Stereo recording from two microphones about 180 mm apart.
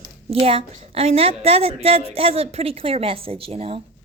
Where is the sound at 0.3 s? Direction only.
30° right (ahead or behind).